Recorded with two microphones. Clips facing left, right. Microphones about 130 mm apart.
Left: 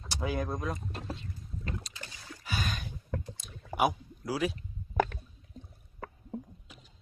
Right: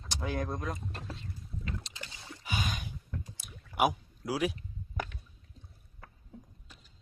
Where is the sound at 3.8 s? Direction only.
10° right (ahead or behind).